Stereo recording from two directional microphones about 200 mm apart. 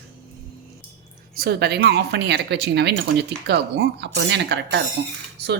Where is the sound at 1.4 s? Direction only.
55° right (ahead or behind).